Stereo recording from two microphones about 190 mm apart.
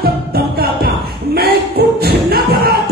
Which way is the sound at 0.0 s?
50° right (ahead or behind).